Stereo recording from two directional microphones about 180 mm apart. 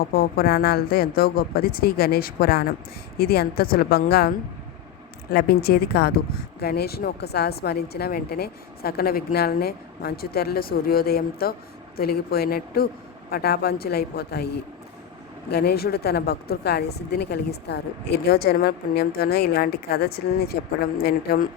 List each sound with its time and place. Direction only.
0.1 s speech: 55° left (ahead or behind)
5.3 s speech: 60° left (ahead or behind)